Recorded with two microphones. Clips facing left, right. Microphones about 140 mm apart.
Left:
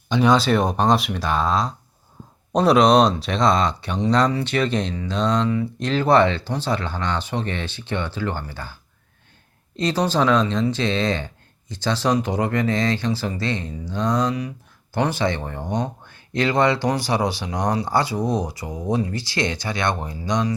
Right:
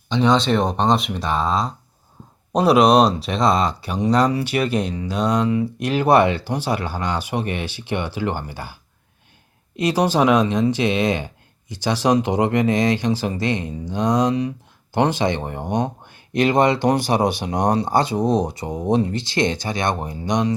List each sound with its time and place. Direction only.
0.1 s speech: 10° left (ahead or behind); by 16.8 s 20° right (ahead or behind)
17.1 s speech: 35° right (ahead or behind)
17.8 s speech: 20° right (ahead or behind)